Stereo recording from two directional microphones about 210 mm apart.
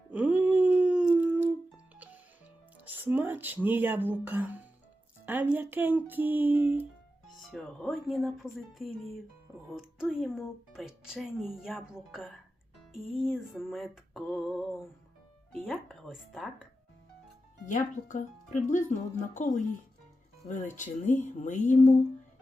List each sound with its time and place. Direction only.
0.1 s a sound: 5° right (ahead or behind)
2.8 s speech: 10° right (ahead or behind)
17.7 s speech: 35° left (ahead or behind)